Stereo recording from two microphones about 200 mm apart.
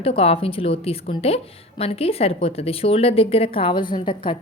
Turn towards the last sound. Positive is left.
turn(degrees=25)  # may be behind; listen again after turning